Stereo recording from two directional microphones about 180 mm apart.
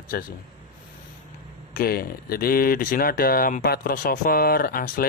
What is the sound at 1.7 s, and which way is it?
Speech, 55° left (ahead or behind).